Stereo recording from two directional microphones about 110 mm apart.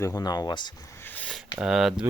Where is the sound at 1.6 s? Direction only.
5° right (ahead or behind).